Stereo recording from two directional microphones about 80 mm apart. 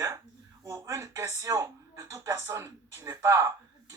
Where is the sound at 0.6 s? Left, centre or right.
Right.